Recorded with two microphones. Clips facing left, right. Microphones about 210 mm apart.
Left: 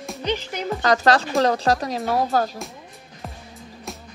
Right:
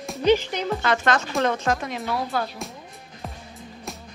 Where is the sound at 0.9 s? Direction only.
35° left (ahead or behind).